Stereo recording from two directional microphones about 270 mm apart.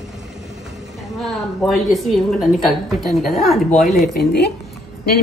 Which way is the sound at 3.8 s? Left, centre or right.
Left.